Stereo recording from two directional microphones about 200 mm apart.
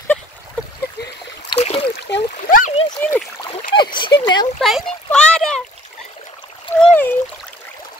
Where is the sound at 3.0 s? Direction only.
10° left (ahead or behind).